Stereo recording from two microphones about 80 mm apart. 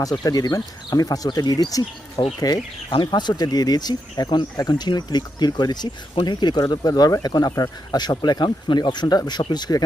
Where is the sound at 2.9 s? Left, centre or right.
Left.